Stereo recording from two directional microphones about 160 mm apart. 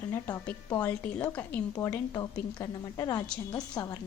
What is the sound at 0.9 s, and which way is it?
Speech, 10° left (ahead or behind).